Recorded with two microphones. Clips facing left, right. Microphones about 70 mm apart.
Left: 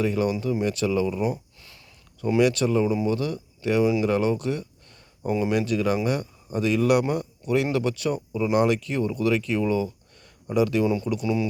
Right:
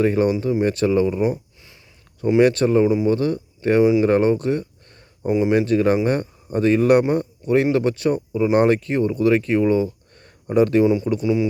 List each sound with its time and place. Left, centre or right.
0.0 s speech: right
2.4 s speech: right
3.1 s speech: right
5.3 s speech: right
5.5 s speech: right
10.8 s speech: right